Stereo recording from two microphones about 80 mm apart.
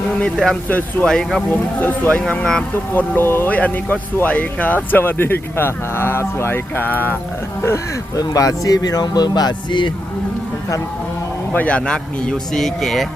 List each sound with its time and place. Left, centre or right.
0.2 s speech: centre
0.7 s speech: left
1.0 s speech: centre
1.8 s speech: left
3.2 s speech: left
8.1 s speech: left
11.5 s speech: centre